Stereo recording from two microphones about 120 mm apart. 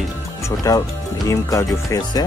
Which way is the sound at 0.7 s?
30° left (ahead or behind).